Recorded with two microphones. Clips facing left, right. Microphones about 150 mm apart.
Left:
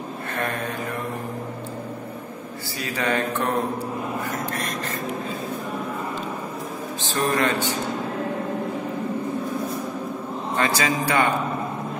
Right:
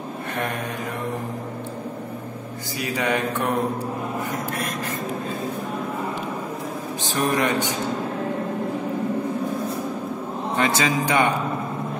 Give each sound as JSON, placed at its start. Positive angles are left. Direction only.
{"t": 2.8, "sound": "mantra", "side_deg": -15}
{"t": 7.2, "sound": "mantra", "side_deg": -15}
{"t": 10.5, "sound": "a man's voice", "side_deg": -20}